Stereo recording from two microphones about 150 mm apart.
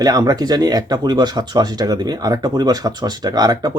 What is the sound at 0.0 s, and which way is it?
Speech, 25° right (ahead or behind).